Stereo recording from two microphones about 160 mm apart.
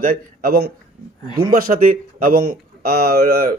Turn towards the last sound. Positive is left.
turn(degrees=-70)  # may be behind; listen again after turning